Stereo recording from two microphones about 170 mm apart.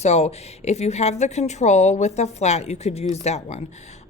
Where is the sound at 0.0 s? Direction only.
40° left (ahead or behind).